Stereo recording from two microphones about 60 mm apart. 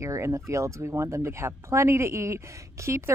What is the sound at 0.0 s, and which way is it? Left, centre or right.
Speech, right.